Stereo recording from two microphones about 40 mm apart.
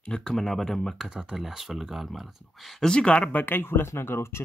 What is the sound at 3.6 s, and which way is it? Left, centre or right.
Speech, left.